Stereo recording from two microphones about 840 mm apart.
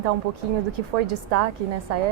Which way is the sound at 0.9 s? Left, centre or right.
Right.